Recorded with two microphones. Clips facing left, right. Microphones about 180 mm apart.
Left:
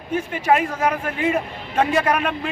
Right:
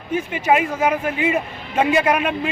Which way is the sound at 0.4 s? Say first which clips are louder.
Right 1 dB; 5° right (ahead or behind).